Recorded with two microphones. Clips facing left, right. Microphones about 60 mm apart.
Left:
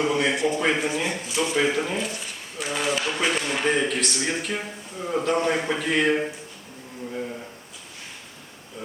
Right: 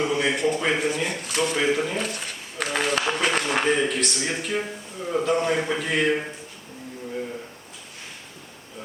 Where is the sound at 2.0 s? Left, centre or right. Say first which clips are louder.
Right 1 dB; right.